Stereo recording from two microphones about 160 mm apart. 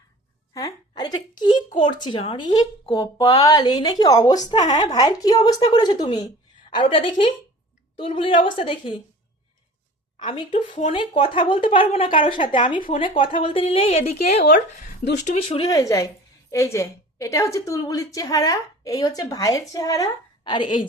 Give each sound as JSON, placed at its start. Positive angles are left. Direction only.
{"t": 0.5, "sound": "a sound", "side_deg": 25}
{"t": 1.8, "sound": "a woman's voice", "side_deg": 30}
{"t": 10.2, "sound": "a woman's voice", "side_deg": 30}
{"t": 15.6, "sound": "a woman's voice", "side_deg": 20}